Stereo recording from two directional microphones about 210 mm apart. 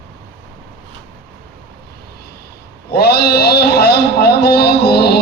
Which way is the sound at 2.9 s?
50° left (ahead or behind).